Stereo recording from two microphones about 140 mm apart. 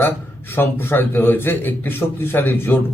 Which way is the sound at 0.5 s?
15° left (ahead or behind).